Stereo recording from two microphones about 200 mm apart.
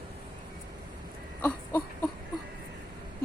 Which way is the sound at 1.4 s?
10° left (ahead or behind).